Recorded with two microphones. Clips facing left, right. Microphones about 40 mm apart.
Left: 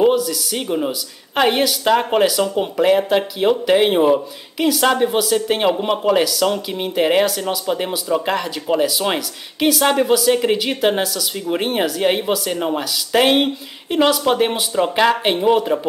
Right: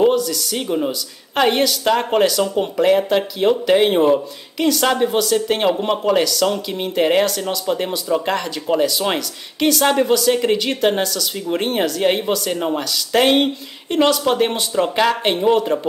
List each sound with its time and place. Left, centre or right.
0.0 s a woman's voice: centre